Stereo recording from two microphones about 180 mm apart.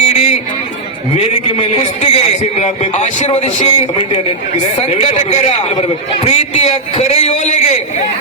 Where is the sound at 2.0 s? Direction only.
40° left (ahead or behind).